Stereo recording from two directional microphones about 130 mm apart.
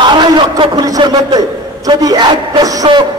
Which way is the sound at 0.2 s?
30° right (ahead or behind).